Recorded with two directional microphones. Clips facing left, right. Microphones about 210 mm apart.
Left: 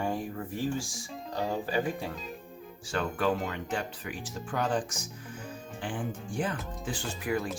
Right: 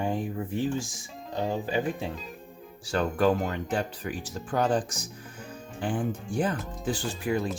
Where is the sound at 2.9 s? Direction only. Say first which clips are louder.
Right 5 dB; 40° right (ahead or behind).